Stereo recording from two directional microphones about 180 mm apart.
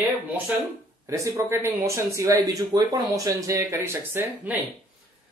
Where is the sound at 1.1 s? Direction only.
15° right (ahead or behind).